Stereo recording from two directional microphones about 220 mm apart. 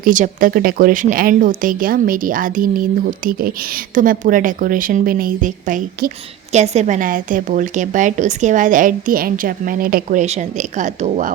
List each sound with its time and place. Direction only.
0.0 s speech: 40° right (ahead or behind)